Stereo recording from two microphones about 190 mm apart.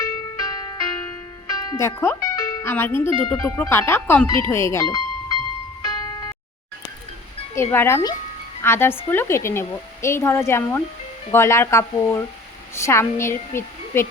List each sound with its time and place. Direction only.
0.0 s music: 20° left (ahead or behind)
1.7 s speech: 15° left (ahead or behind)
5.8 s music: 20° left (ahead or behind)
7.5 s speech: 15° left (ahead or behind)